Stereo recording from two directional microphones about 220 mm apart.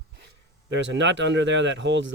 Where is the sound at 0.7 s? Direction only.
55° right (ahead or behind).